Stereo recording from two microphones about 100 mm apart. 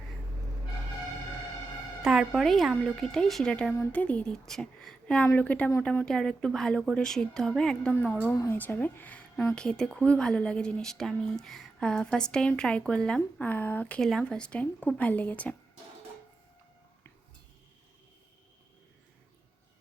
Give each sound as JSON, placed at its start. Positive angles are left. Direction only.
{"t": 2.0, "sound": "a woman's voice", "side_deg": -5}
{"t": 8.4, "sound": "a woman's voice", "side_deg": 20}